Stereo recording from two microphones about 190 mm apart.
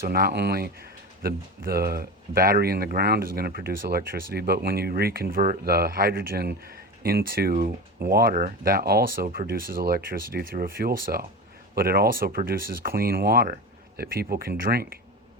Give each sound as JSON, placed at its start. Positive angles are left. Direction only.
{"t": 0.0, "sound": "speech", "side_deg": -50}